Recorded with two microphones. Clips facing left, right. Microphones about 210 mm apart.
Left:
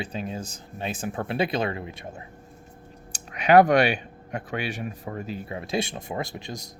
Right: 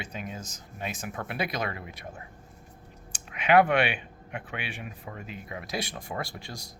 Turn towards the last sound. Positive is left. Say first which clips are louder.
# left 5 dB
turn(degrees=20)  # may be behind; listen again after turning